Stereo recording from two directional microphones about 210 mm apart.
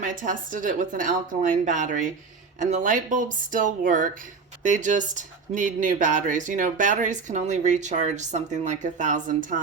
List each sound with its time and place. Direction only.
0.0 s speech: 40° right (ahead or behind)